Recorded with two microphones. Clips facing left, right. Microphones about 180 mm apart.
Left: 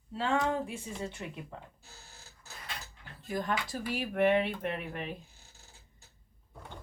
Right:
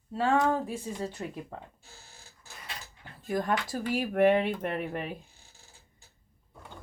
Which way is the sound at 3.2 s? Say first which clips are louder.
Right 4 dB; 50° right (ahead or behind).